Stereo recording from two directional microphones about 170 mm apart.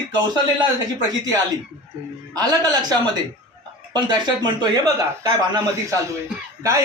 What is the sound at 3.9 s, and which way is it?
Speech, 25° right (ahead or behind).